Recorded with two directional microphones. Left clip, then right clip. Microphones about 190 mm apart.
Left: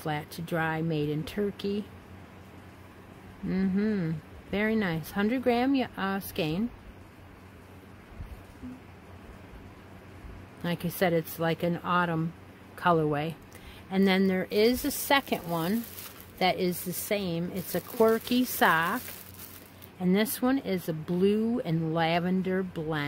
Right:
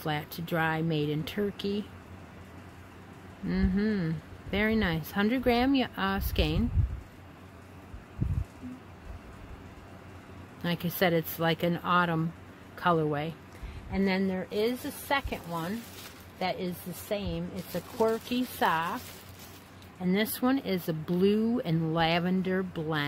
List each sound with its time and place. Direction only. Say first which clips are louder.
0.0 s speech: even; 5° left (ahead or behind)
3.4 s speech: left 1 dB; 10° left (ahead or behind)
10.6 s speech: even; 10° left (ahead or behind)
13.9 s speech: left 4 dB; 40° left (ahead or behind)
20.0 s speech: left 2 dB; 20° left (ahead or behind)